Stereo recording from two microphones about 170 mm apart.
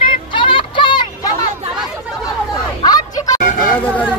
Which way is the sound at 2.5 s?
25° left (ahead or behind).